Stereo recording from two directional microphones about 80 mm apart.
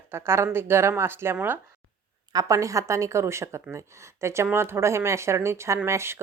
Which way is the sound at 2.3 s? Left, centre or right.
Right.